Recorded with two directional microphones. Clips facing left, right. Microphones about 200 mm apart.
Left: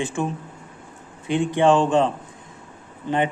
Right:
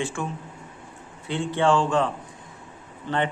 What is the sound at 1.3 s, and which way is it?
A man's voice, 15° left (ahead or behind).